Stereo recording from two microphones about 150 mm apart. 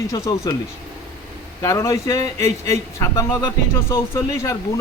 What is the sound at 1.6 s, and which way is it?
A man's voice, 20° left (ahead or behind).